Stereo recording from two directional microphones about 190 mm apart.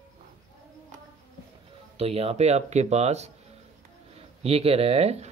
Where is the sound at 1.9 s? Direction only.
30° right (ahead or behind).